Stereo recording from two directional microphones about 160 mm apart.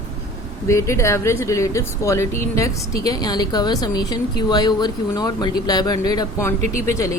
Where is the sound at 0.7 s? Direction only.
20° left (ahead or behind).